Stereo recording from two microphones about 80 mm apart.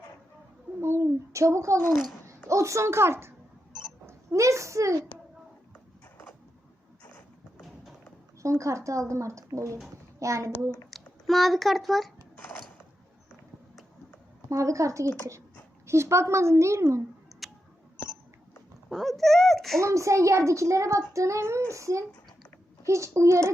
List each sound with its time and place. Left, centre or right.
0.8 s a child's voice: right
1.9 s a child's voice: centre
2.5 s a child's voice: right
8.4 s a child's voice: right
10.9 s a child's voice: centre
12.4 s mechanisms: centre
14.5 s a child's voice: right
17.4 s a sound: centre
18.9 s a child's voice: centre
19.8 s a child's voice: right